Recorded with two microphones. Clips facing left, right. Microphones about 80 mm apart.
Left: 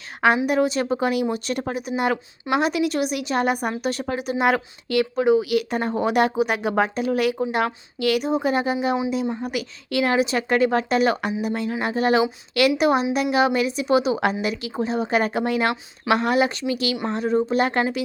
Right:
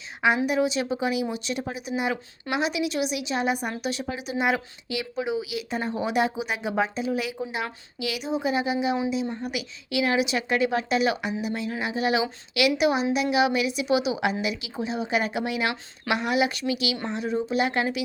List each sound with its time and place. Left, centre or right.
0.4 s a woman's voice: left